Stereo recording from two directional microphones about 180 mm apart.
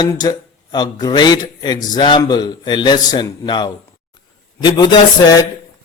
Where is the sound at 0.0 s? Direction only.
20° left (ahead or behind).